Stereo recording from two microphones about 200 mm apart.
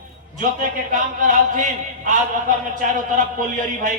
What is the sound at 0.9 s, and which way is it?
Speech, 40° right (ahead or behind).